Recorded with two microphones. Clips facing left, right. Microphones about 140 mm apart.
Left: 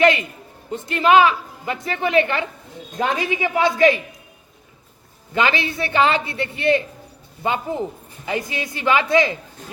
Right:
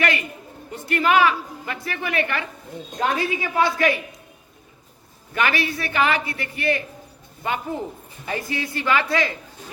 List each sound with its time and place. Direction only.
0.0 s a woman's voice: 20° left (ahead or behind)
5.3 s a woman's voice: 20° left (ahead or behind)